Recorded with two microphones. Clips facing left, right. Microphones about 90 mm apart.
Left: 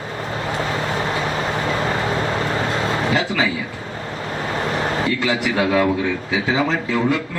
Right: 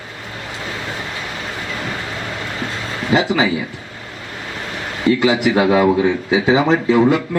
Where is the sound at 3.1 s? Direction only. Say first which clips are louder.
Right 9 dB; 20° right (ahead or behind).